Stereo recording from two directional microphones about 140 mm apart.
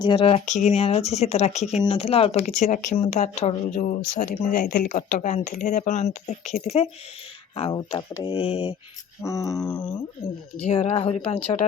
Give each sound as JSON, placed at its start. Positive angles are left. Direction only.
{"t": 0.0, "sound": "speech", "side_deg": 35}
{"t": 1.8, "sound": "speech", "side_deg": 40}
{"t": 7.7, "sound": "speech", "side_deg": 30}
{"t": 9.2, "sound": "a sound", "side_deg": 25}
{"t": 9.6, "sound": "speech", "side_deg": 10}
{"t": 10.6, "sound": "speech", "side_deg": 45}